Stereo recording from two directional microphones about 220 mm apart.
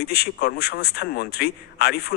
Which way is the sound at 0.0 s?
45° left (ahead or behind).